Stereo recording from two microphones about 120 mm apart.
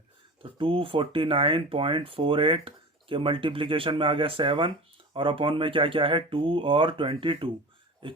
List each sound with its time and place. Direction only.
0.6 s speech: 45° right (ahead or behind)